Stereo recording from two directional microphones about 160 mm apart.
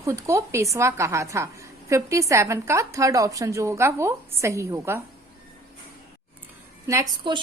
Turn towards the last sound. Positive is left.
turn(degrees=-25)  # may be behind; listen again after turning